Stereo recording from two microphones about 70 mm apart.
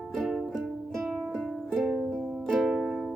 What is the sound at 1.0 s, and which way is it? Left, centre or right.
Music, centre.